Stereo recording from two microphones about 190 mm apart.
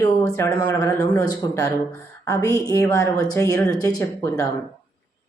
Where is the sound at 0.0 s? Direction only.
15° left (ahead or behind).